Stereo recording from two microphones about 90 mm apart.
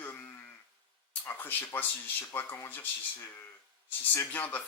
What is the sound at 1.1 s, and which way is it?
Speech, 25° left (ahead or behind).